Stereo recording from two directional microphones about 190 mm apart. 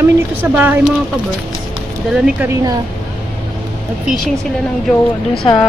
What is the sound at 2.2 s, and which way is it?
Speech, 10° right (ahead or behind).